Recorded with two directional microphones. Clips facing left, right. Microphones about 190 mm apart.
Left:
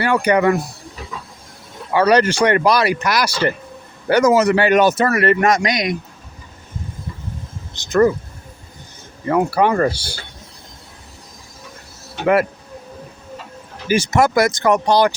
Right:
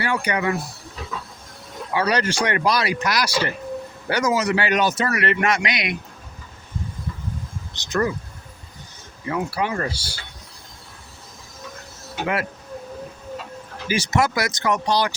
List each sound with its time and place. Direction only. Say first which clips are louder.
0.0 s speech: left 8 dB; 60° left (ahead or behind)
1.9 s a man's voice: left 8 dB; 60° left (ahead or behind); by 6.0 s 40° left (ahead or behind)
7.8 s a man's voice: left 9 dB; 50° left (ahead or behind)
9.2 s speech: left 9 dB; 55° left (ahead or behind)
13.8 s a man's voice: left 5 dB; 50° left (ahead or behind)